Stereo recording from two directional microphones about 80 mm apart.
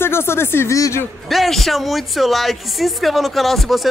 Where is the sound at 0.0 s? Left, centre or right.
Left.